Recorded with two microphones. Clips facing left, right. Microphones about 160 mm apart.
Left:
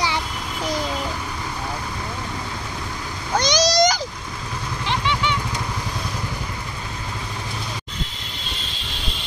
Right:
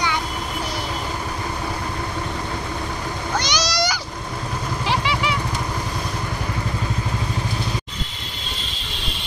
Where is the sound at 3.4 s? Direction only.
45° left (ahead or behind).